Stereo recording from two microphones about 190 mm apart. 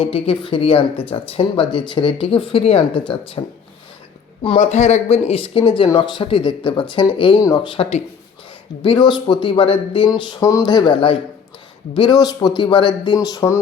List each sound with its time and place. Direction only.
0.0 s speech: 30° left (ahead or behind)
4.4 s speech: 35° left (ahead or behind); by 13.6 s 15° left (ahead or behind)